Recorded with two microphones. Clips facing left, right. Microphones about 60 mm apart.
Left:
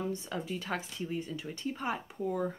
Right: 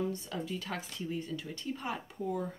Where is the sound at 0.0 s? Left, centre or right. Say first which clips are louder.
Even; left.